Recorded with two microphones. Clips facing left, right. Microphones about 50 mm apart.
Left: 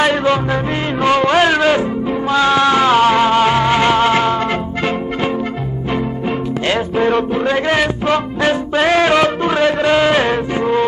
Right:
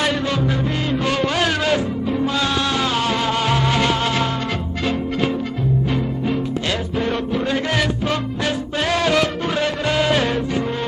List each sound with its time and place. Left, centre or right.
0.0 s music: left
6.2 s music: left